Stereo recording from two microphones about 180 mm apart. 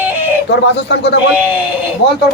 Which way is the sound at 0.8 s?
75° left (ahead or behind).